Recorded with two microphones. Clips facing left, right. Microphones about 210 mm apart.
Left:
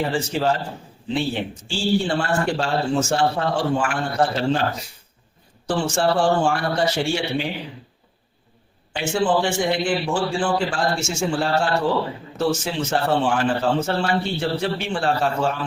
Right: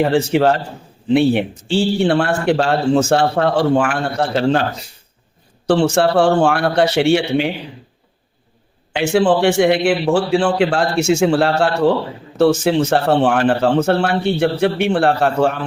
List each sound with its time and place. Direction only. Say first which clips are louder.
0.0 s a man's voice: right 8 dB; 60° right (ahead or behind)
5.6 s a man's voice: right 7 dB; 60° right (ahead or behind)
8.9 s a man's voice: right 6 dB; 70° right (ahead or behind)